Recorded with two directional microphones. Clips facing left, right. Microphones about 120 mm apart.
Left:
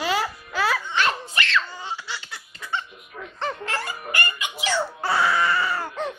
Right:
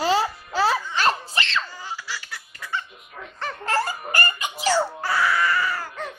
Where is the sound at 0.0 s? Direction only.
30° right (ahead or behind).